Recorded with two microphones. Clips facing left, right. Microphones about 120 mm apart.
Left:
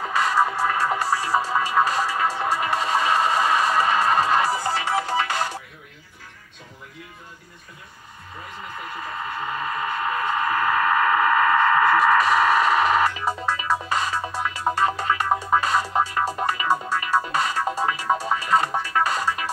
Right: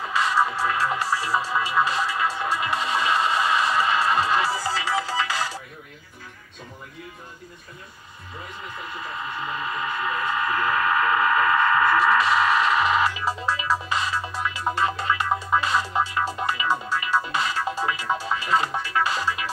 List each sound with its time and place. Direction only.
0.0 s music: 45° left (ahead or behind)
9.1 s a sound: 40° left (ahead or behind)
15.5 s music: 40° left (ahead or behind)